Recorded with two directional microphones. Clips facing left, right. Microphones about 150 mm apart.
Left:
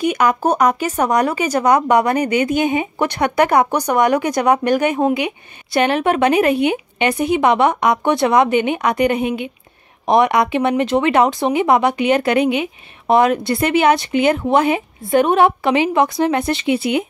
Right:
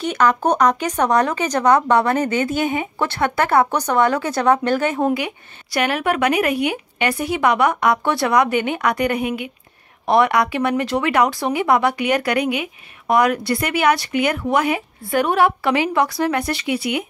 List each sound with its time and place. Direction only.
0.0 s speech: 10° left (ahead or behind)